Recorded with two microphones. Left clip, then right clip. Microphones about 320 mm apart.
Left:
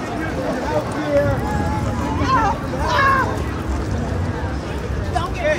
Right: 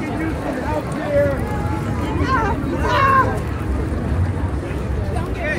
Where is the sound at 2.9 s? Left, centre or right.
Left.